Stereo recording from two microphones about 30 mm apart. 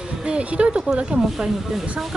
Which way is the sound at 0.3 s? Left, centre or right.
Right.